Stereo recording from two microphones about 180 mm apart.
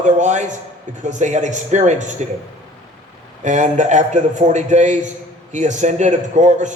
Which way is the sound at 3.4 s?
40° right (ahead or behind).